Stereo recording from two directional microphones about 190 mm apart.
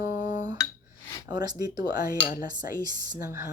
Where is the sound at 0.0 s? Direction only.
45° left (ahead or behind).